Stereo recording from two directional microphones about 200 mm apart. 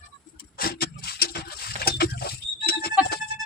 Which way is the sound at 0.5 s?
50° left (ahead or behind).